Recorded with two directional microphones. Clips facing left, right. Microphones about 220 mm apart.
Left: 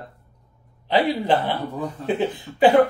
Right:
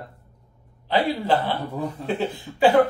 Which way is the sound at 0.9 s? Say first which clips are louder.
Left 2 dB; 20° left (ahead or behind).